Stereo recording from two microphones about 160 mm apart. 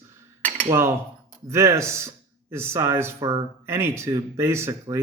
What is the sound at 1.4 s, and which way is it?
Speech, 20° right (ahead or behind).